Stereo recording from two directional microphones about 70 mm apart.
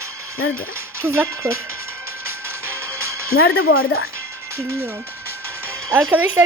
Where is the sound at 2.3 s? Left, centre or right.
Right.